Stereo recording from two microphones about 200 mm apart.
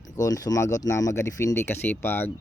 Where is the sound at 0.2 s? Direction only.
20° left (ahead or behind).